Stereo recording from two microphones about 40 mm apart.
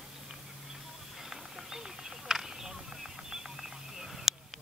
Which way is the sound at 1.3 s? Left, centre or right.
Centre.